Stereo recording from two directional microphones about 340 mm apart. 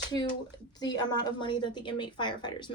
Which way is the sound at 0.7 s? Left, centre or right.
Centre.